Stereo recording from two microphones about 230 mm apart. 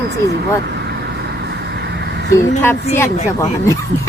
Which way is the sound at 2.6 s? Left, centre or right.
Centre.